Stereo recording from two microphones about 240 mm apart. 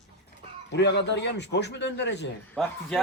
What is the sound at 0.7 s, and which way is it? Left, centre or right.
Speech, left.